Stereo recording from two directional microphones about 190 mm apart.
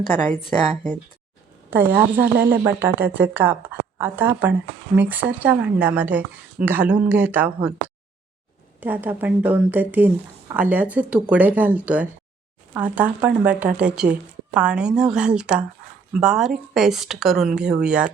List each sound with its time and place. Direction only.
1.7 s a woman's voice: 10° right (ahead or behind)
2.2 s speech: 55° right (ahead or behind)
2.6 s a woman's voice: 10° right (ahead or behind)
8.8 s a woman's voice: 10° right (ahead or behind)